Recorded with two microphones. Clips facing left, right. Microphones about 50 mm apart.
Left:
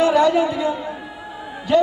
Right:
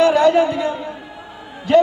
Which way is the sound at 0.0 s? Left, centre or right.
Right.